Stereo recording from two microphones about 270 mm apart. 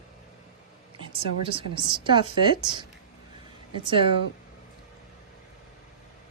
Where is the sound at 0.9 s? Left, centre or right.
Centre.